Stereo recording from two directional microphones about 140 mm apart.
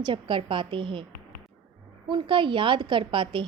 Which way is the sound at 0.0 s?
35° right (ahead or behind).